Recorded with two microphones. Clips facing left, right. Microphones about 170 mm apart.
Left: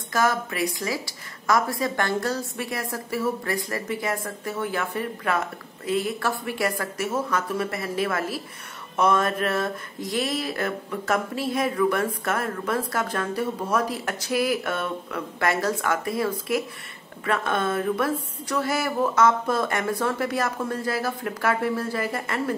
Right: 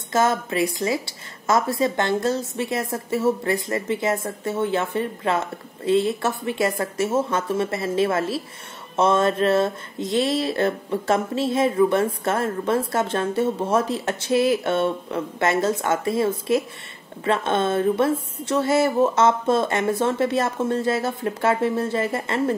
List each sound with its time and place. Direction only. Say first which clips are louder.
0.1 s a woman's voice: right 3 dB; 25° right (ahead or behind)